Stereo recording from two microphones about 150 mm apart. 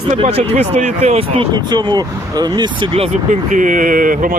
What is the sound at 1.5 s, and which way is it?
Speech, 30° right (ahead or behind).